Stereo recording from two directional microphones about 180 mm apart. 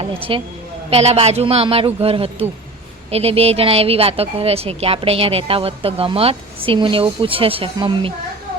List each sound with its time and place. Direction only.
0.0 s a woman's voice: 30° right (ahead or behind)